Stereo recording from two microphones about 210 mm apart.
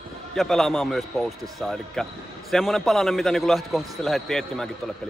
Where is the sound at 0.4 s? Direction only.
Centre (ahead or behind).